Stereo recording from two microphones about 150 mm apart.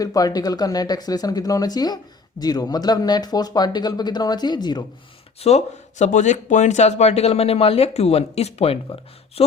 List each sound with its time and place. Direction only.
0.0 s speech: 25° left (ahead or behind)
5.4 s speech: 45° left (ahead or behind)